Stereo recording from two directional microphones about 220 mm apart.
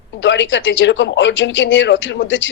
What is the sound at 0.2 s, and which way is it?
Speech, 55° left (ahead or behind).